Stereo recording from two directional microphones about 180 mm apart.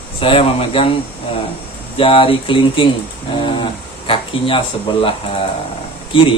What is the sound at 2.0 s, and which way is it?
Speech, 30° left (ahead or behind).